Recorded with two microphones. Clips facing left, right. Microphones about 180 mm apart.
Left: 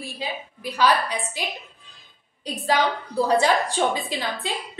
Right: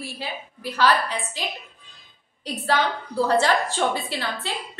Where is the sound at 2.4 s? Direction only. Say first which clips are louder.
Left 1 dB; 15° left (ahead or behind).